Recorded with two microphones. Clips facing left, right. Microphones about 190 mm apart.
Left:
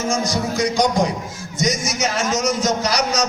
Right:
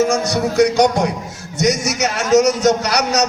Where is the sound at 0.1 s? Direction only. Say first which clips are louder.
Right 3 dB; 65° right (ahead or behind).